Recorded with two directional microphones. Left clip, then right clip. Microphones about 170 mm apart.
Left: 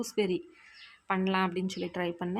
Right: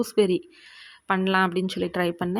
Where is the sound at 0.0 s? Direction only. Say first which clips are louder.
Right 9 dB; 25° right (ahead or behind).